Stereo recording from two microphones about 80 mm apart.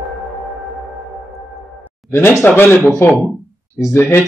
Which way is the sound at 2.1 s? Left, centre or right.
Left.